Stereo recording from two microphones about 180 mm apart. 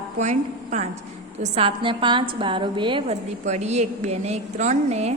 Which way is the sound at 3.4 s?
40° right (ahead or behind).